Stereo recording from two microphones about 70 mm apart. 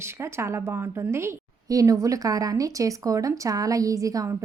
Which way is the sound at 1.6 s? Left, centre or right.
Right.